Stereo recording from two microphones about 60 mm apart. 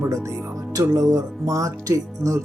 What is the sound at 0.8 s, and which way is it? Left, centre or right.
Speech, right.